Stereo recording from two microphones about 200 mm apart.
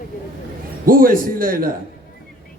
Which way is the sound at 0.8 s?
45° right (ahead or behind).